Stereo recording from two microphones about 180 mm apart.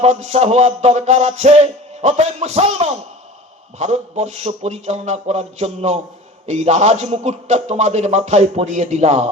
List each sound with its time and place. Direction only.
0.0 s a man's voice: 35° right (ahead or behind)